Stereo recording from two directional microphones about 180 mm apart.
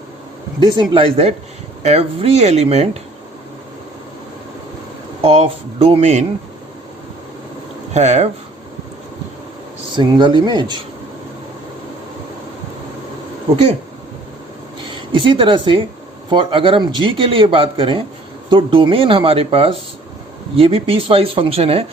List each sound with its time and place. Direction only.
0.6 s speech: 30° right (ahead or behind)
5.2 s speech: 35° right (ahead or behind)
7.9 s speech: 40° right (ahead or behind)
9.9 s speech: 25° right (ahead or behind)
14.8 s a woman's voice: 30° right (ahead or behind)